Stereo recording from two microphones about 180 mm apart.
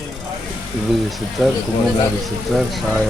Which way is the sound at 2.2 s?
Centre (ahead or behind).